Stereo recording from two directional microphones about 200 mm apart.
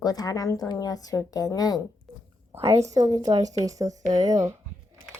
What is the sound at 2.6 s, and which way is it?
Speech, 15° right (ahead or behind).